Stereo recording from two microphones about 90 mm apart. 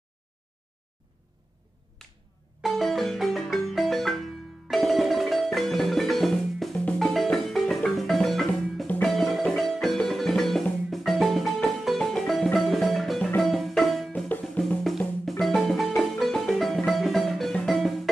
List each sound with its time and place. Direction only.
2.6 s marimba: centre (ahead or behind)
7.0 s music: 5° left (ahead or behind)
14.1 s music: 20° left (ahead or behind)
14.8 s music: centre (ahead or behind)